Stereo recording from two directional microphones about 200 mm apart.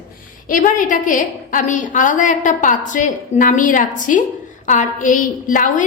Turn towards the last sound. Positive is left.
turn(degrees=40)  # may be behind; listen again after turning